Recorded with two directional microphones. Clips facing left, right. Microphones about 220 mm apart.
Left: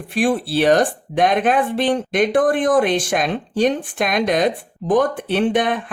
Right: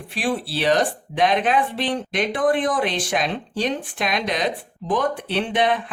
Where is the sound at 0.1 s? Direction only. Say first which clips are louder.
Left 6 dB; 50° left (ahead or behind).